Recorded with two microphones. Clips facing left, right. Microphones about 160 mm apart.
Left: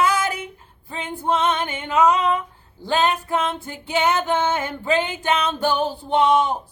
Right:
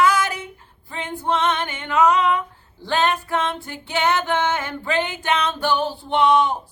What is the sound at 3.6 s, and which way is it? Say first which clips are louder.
Female singing: left 1 dB; 20° left (ahead or behind).